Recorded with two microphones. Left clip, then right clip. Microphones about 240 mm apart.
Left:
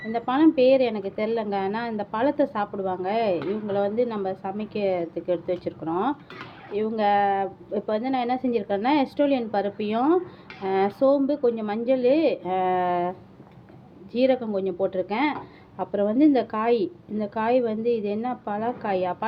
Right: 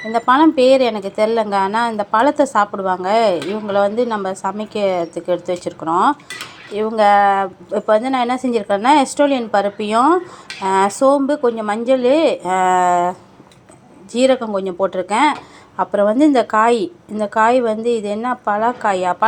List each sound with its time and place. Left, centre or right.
0.1 s a woman's voice: centre